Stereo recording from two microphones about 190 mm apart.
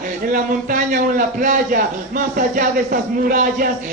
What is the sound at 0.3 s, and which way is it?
A man's voice, 45° right (ahead or behind).